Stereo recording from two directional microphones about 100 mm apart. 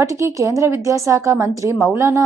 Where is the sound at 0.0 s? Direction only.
30° right (ahead or behind).